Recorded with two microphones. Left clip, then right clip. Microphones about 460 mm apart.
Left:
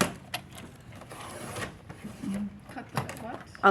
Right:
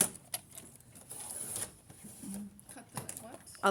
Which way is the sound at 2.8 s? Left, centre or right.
Right.